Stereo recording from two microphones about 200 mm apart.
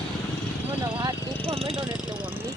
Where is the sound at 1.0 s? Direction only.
25° right (ahead or behind).